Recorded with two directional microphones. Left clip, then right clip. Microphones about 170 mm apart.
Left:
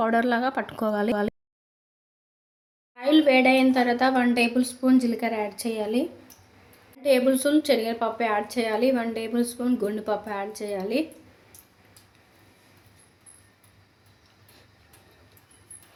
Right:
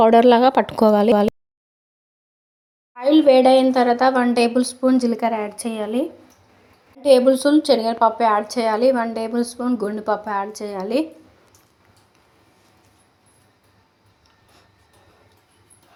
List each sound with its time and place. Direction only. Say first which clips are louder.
0.0 s speech: right 11 dB; 35° right (ahead or behind)
2.9 s a woman's voice: right 6 dB; 15° right (ahead or behind)
4.9 s a woman's voice: right 5 dB; 5° left (ahead or behind)
7.0 s a woman's voice: right 7 dB; 20° right (ahead or behind)
7.7 s a woman's voice: right 8 dB; 5° left (ahead or behind)